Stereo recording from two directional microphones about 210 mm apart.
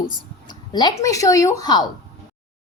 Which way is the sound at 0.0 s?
20° left (ahead or behind).